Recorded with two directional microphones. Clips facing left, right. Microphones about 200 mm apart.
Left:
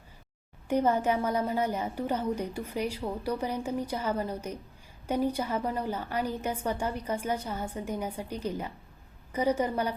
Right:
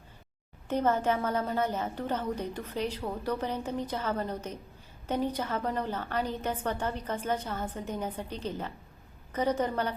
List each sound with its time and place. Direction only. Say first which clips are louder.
0.7 s a woman's voice: left 1 dB; 10° left (ahead or behind)